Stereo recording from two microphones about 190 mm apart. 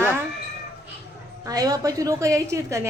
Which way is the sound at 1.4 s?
20° right (ahead or behind).